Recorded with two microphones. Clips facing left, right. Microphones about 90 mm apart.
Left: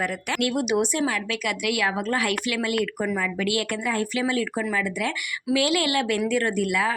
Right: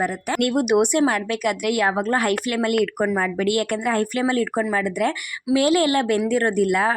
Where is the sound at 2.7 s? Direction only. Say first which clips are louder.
Right 5 dB; 60° right (ahead or behind).